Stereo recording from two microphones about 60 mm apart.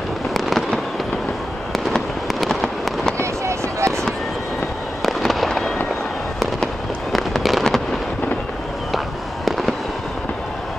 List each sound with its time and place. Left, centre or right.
0.3 s fireworks: centre
3.2 s fireworks: right
5.0 s fireworks: centre
8.9 s fireworks: centre